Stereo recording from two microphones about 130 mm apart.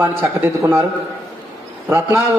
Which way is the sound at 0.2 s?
20° right (ahead or behind).